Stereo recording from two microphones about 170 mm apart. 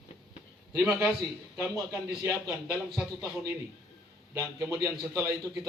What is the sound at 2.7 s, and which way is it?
Speech, 5° right (ahead or behind).